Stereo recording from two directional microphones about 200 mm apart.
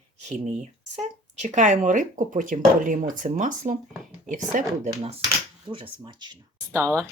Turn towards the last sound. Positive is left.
turn(degrees=-15)  # may be behind; listen again after turning